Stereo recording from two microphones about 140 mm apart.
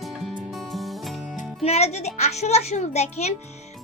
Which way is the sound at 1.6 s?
50° left (ahead or behind).